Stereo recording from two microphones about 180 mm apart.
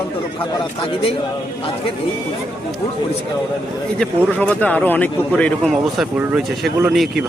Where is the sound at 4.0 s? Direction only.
5° left (ahead or behind).